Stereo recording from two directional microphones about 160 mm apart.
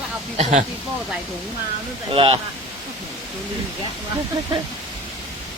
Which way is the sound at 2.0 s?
35° right (ahead or behind).